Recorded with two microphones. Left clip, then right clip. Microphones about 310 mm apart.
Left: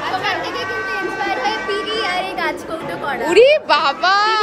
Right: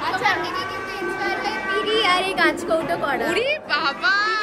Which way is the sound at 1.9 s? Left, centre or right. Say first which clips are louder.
Right 1 dB; right.